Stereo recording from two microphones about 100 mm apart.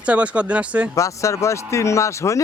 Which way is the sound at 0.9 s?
30° left (ahead or behind).